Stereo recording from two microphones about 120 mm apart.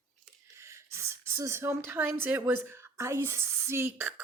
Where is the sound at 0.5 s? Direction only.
25° right (ahead or behind).